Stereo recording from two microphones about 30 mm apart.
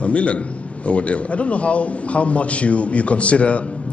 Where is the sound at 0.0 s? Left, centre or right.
Left.